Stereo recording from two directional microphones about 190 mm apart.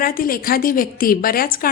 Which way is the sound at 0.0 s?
50° left (ahead or behind).